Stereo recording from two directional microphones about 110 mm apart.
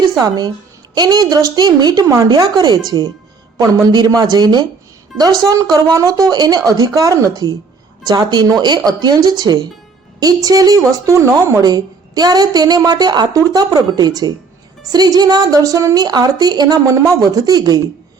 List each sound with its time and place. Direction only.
0.2 s a woman's voice: 40° right (ahead or behind)